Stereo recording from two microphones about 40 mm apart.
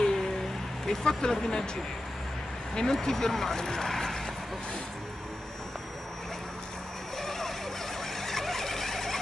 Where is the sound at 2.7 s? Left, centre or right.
Centre.